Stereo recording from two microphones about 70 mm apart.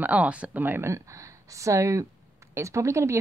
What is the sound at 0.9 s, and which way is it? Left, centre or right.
Speech, right.